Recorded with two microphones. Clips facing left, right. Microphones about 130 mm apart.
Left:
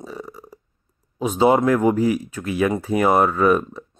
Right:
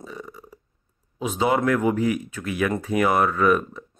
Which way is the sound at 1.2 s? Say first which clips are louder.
Left 5 dB; 35° left (ahead or behind).